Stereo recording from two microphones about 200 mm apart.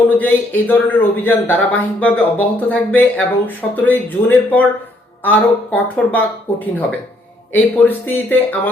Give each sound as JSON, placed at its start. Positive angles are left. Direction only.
{"t": 0.2, "sound": "a man's voice", "side_deg": 10}
{"t": 7.5, "sound": "a man's voice", "side_deg": 10}